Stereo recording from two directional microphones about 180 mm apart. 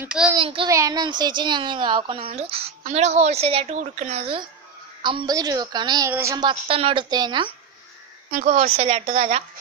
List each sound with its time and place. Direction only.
0.0 s child singing: 5° right (ahead or behind)
0.4 s a woman's voice: 30° right (ahead or behind)
0.7 s a woman's voice: 20° right (ahead or behind)
8.3 s a woman's voice: 45° right (ahead or behind)